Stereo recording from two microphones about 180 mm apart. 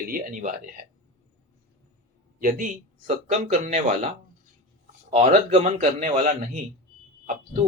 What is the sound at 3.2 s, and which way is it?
Speech, 40° right (ahead or behind).